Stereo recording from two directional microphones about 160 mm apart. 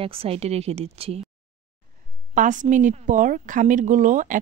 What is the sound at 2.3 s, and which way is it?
A woman's voice, 50° right (ahead or behind).